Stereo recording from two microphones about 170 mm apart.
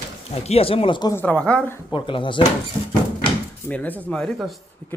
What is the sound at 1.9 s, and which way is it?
Speech, 30° left (ahead or behind).